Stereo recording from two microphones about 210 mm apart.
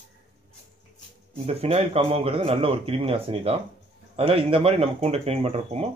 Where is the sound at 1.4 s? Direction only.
30° right (ahead or behind).